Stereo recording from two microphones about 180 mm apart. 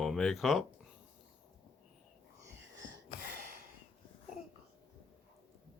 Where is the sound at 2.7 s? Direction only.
90° right; by 3.6 s 65° right (ahead or behind).